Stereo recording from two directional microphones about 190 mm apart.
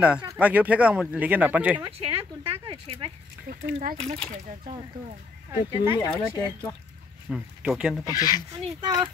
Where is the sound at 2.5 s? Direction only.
25° right (ahead or behind).